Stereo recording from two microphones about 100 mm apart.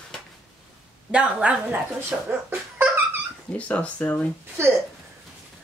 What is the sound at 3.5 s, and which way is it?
Speech, 15° left (ahead or behind).